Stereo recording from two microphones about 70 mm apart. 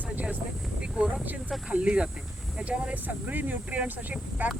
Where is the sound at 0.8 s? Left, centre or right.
Centre.